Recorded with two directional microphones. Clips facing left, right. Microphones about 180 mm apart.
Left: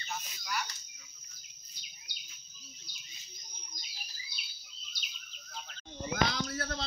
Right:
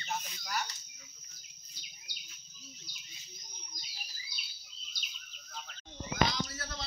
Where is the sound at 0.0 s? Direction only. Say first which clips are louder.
Right 3 dB; 45° right (ahead or behind).